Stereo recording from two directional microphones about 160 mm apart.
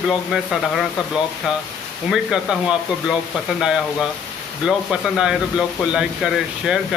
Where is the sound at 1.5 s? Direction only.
5° right (ahead or behind).